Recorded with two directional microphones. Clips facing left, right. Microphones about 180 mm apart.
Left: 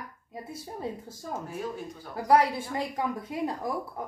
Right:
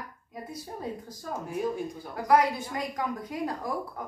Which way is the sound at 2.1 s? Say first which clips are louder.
Left 1 dB; 30° left (ahead or behind).